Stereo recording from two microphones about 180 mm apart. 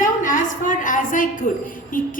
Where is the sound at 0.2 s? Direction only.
45° left (ahead or behind).